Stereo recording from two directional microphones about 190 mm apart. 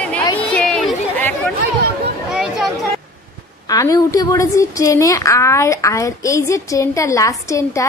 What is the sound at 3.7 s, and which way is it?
A woman's voice, 20° left (ahead or behind).